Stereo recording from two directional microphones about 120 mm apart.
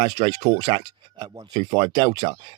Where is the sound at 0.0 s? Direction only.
35° right (ahead or behind).